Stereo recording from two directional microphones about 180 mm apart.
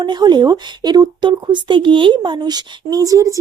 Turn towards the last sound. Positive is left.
turn(degrees=-20)  # may be behind; listen again after turning